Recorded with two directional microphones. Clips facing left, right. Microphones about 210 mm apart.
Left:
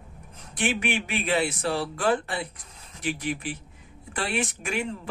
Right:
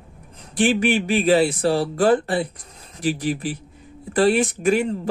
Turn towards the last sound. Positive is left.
turn(degrees=-35)  # may be behind; listen again after turning